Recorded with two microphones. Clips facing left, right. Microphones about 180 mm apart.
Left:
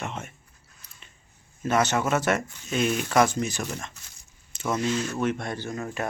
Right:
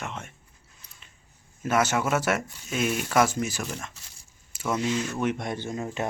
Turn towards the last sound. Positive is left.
turn(degrees=-20)  # may be behind; listen again after turning